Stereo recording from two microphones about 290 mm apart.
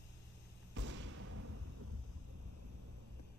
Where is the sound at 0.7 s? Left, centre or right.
Right.